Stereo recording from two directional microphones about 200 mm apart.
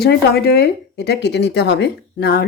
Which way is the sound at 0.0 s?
55° left (ahead or behind).